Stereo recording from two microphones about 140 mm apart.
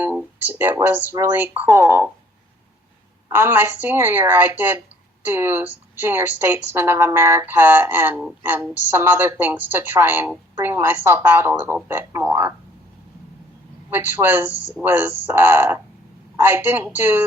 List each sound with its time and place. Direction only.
0.0 s speech: 15° right (ahead or behind)
3.2 s speech: 15° right (ahead or behind)
13.9 s speech: 15° right (ahead or behind)